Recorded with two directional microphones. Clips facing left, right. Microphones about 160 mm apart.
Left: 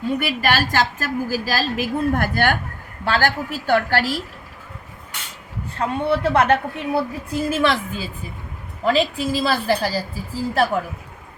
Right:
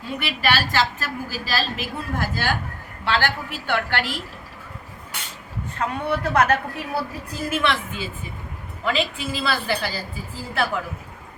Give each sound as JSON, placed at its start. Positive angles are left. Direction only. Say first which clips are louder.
{"t": 0.2, "sound": "a woman's voice", "louder": "left 3 dB", "side_deg": 45}
{"t": 3.0, "sound": "a woman's voice", "louder": "left 3 dB", "side_deg": 45}
{"t": 5.7, "sound": "a woman's voice", "louder": "left 4 dB", "side_deg": 30}
{"t": 7.5, "sound": "a woman's voice", "louder": "left 2 dB", "side_deg": 40}